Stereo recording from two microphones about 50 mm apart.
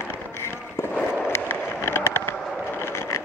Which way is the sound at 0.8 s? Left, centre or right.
Left.